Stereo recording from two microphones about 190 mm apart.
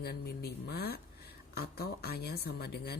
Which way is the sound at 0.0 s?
55° left (ahead or behind).